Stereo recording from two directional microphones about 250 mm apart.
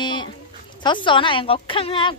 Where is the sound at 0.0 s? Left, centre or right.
Centre.